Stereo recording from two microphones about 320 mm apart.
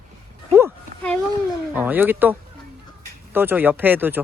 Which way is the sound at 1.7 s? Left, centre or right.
Centre.